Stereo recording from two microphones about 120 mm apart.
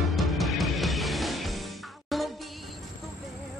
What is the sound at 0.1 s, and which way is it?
Music, centre (ahead or behind).